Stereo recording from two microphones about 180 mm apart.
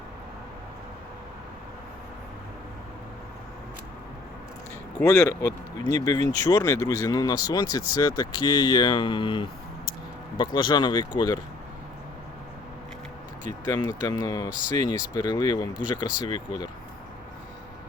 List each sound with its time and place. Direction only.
4.9 s speech: 15° left (ahead or behind)
13.7 s speech: 20° left (ahead or behind)